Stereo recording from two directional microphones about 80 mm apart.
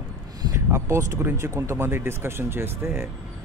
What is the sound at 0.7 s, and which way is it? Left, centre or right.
Speech, right.